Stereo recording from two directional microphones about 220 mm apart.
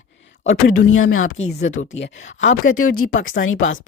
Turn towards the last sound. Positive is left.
turn(degrees=60)  # may be behind; listen again after turning